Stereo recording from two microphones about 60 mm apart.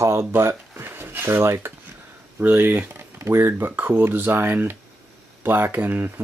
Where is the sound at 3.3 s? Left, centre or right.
Right.